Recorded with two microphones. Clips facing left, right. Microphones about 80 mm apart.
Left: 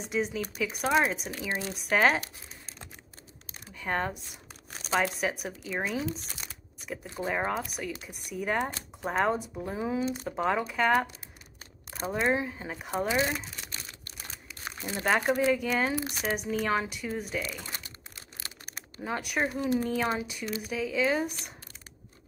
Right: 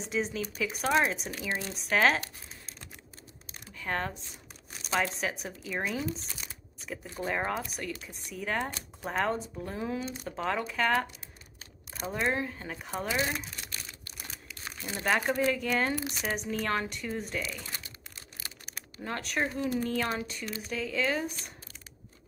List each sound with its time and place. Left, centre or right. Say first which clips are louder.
0.0 s speech: left 1 dB; centre
1.3 s speech: left 1 dB; centre
3.8 s speech: left 2 dB; centre
7.2 s speech: left 2 dB; centre
12.1 s speech: left 3 dB; centre
14.6 s crumpling: left 3 dB; left
15.0 s speech: left 2 dB; centre
18.9 s speech: left 2 dB; centre